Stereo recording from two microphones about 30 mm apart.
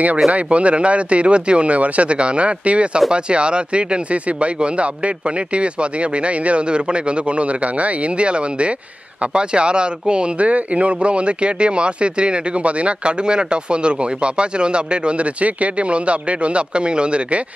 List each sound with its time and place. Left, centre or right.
0.3 s speech: right
10.4 s speech: right
13.2 s speech: right